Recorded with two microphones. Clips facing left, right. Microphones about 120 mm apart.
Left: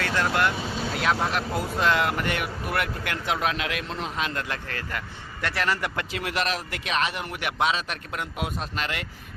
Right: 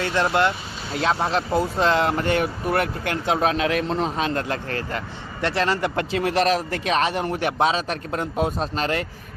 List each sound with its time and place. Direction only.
0.0 s speech: 25° right (ahead or behind)